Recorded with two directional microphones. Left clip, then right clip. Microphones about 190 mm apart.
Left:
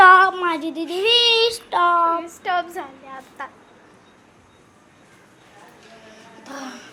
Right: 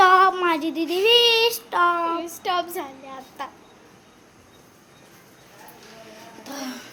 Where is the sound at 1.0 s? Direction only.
20° right (ahead or behind); by 2.0 s 5° right (ahead or behind).